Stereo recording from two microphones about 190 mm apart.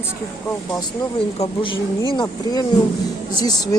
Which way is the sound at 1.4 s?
25° left (ahead or behind).